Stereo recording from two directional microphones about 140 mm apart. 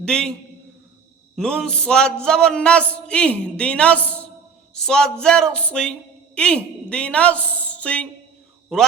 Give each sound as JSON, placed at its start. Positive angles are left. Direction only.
{"t": 0.0, "sound": "a man's voice", "side_deg": 5}
{"t": 1.4, "sound": "a man's voice", "side_deg": 5}